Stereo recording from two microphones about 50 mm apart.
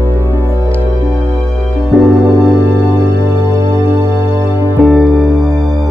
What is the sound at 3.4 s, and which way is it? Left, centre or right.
Music, right.